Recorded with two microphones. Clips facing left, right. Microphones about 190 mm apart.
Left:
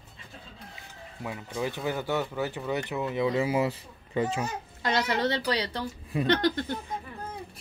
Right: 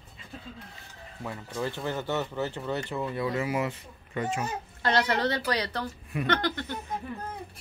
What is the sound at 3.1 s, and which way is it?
Speech, 25° left (ahead or behind).